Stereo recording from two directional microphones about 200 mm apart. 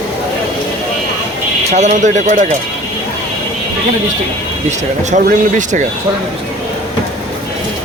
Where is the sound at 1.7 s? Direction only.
35° right (ahead or behind).